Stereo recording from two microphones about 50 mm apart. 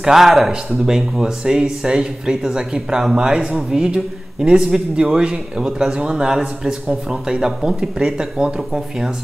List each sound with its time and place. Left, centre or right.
0.0 s speech: centre